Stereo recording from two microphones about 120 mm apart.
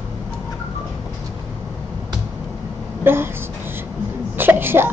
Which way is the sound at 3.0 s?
20° right (ahead or behind).